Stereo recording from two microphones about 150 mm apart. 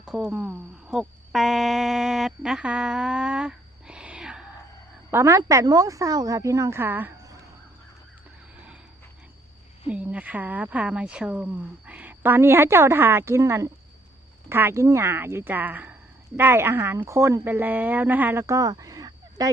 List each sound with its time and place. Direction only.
0.2 s speech: 10° right (ahead or behind)
5.1 s speech: 20° right (ahead or behind)
9.8 s speech: 10° right (ahead or behind)